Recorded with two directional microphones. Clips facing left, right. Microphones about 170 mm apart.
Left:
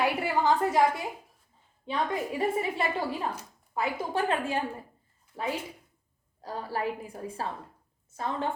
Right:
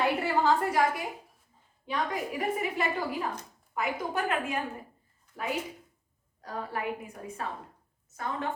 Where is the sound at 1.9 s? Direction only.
25° left (ahead or behind).